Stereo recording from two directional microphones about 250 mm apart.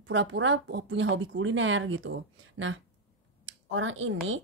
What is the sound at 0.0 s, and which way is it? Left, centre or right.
A woman's voice, right.